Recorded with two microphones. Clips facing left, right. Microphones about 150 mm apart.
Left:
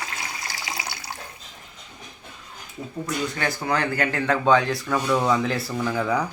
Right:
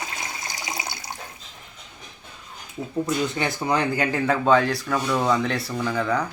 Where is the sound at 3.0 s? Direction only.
20° right (ahead or behind).